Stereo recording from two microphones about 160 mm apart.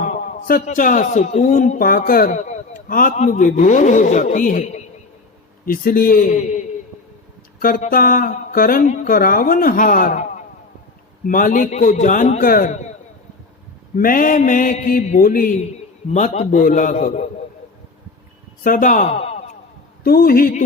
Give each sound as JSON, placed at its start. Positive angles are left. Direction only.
{"t": 0.0, "sound": "a man's voice", "side_deg": 60}
{"t": 5.6, "sound": "mantra", "side_deg": 65}
{"t": 6.4, "sound": "a sound", "side_deg": 45}
{"t": 7.6, "sound": "mantra", "side_deg": 60}
{"t": 11.3, "sound": "a man's voice", "side_deg": 55}
{"t": 12.7, "sound": "a sound", "side_deg": 45}
{"t": 13.9, "sound": "mantra", "side_deg": 60}
{"t": 16.1, "sound": "a man's voice", "side_deg": 50}
{"t": 18.6, "sound": "a man's voice", "side_deg": 55}
{"t": 20.1, "sound": "mantra", "side_deg": 65}